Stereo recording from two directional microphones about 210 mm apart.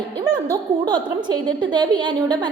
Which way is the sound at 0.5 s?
20° right (ahead or behind).